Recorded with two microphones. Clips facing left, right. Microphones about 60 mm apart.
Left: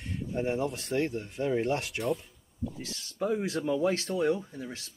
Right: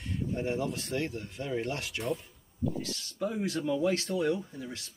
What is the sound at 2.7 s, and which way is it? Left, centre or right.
Speech, left.